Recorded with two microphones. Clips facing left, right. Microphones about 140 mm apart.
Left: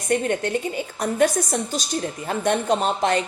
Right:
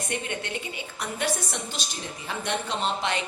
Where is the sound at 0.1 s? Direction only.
45° left (ahead or behind).